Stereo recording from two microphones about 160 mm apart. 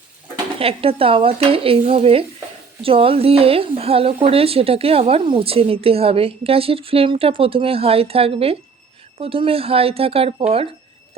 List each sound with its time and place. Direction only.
0.6 s speech: 35° right (ahead or behind)